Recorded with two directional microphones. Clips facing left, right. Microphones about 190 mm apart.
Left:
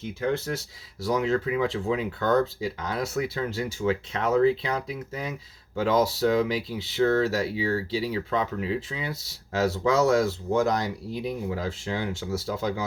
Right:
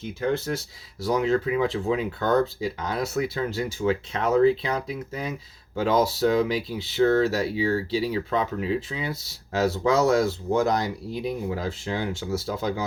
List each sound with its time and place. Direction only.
0.2 s speech: 35° right (ahead or behind)